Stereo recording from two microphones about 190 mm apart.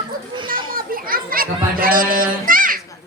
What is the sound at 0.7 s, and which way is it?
Children playing, 50° right (ahead or behind).